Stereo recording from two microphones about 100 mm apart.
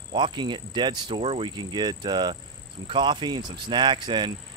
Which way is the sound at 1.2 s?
70° right (ahead or behind).